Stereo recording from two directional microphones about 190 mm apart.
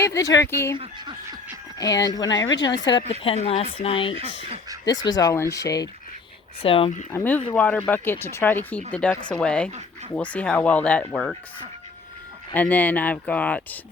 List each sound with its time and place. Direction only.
0.0 s speech: 15° left (ahead or behind)
0.8 s speech: 25° right (ahead or behind)
1.8 s speech: 20° left (ahead or behind)
5.0 s speech: 20° left (ahead or behind)
6.6 s speech: 30° left (ahead or behind)
7.1 s speech: 10° left (ahead or behind)
12.5 s speech: 10° left (ahead or behind)